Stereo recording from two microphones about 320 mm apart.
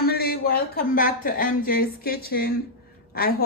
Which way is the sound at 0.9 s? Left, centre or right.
Left.